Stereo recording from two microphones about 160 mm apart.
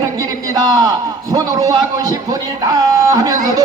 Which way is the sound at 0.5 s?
25° right (ahead or behind).